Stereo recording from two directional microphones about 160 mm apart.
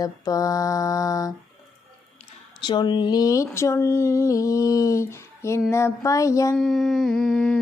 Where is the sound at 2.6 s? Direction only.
30° left (ahead or behind).